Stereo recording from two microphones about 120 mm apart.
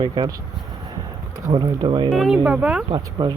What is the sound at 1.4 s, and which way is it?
Speech, 30° right (ahead or behind).